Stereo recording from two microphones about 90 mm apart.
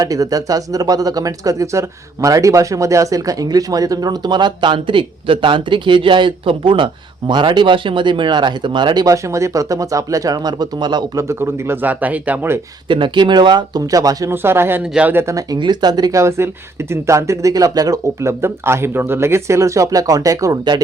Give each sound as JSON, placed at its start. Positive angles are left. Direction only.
{"t": 0.0, "sound": "speech", "side_deg": -40}
{"t": 9.0, "sound": "speech", "side_deg": -35}
{"t": 11.2, "sound": "speech", "side_deg": -30}
{"t": 12.9, "sound": "speech", "side_deg": -65}
{"t": 14.3, "sound": "speech", "side_deg": -25}
{"t": 15.2, "sound": "speech", "side_deg": -35}
{"t": 15.5, "sound": "speech", "side_deg": -55}
{"t": 16.9, "sound": "speech", "side_deg": -35}